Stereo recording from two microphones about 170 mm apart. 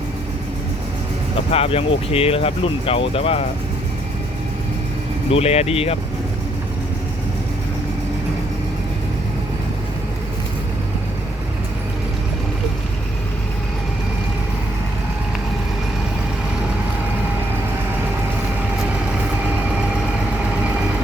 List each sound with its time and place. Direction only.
1.5 s speech: 35° left (ahead or behind)
5.3 s speech: 35° left (ahead or behind)